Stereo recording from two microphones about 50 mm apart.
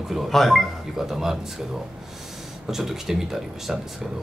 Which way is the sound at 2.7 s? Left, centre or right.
Centre.